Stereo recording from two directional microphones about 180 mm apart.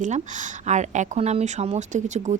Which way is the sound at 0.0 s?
45° right (ahead or behind).